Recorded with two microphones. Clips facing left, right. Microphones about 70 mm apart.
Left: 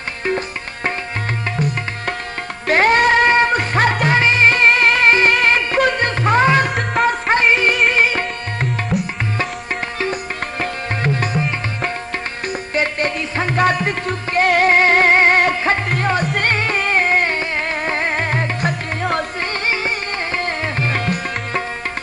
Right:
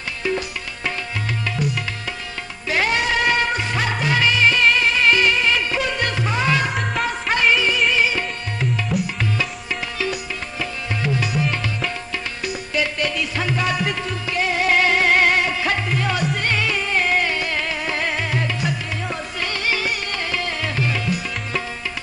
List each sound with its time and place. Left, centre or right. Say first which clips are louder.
1.6 s tabla: left 3 dB; left
2.7 s music: left 7 dB; left
8.9 s tabla: left 3 dB; centre
10.6 s music: left 3 dB; left
12.7 s music: left 3 dB; left
19.4 s music: left 2 dB; left